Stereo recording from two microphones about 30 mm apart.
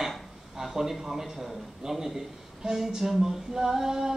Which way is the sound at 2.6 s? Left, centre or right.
Right.